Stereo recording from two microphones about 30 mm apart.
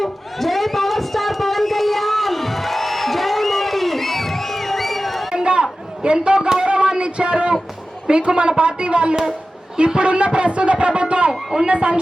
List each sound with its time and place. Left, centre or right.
0.0 s a sound: centre
5.3 s chatter: right
6.0 s a man's voice: right
6.7 s a sound: right
8.0 s a man's voice: right
11.3 s speech: right
11.7 s a man's voice: right